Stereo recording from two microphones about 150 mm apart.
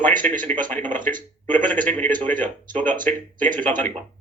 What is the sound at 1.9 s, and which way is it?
Speech, 10° left (ahead or behind).